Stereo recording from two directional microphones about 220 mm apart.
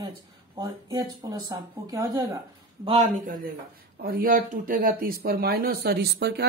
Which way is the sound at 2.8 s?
35° right (ahead or behind).